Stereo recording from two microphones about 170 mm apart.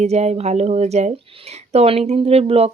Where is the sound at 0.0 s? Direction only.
40° right (ahead or behind).